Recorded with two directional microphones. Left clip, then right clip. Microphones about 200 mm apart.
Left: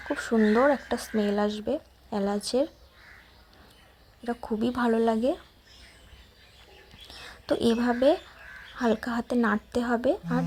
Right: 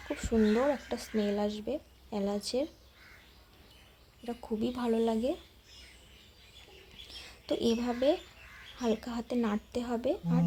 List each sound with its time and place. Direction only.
0.1 s speech: 15° left (ahead or behind)
4.2 s speech: 15° left (ahead or behind)
7.4 s speech: 15° left (ahead or behind)